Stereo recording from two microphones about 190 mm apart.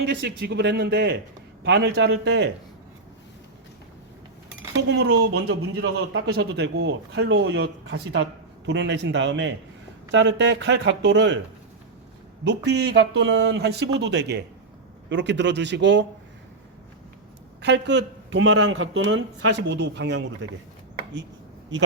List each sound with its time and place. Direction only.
0.0 s a man's voice: 60° right (ahead or behind)
4.7 s a man's voice: 65° right (ahead or behind)
12.5 s a man's voice: 65° right (ahead or behind)
17.6 s speech: 65° right (ahead or behind)
21.7 s speech: 75° right (ahead or behind)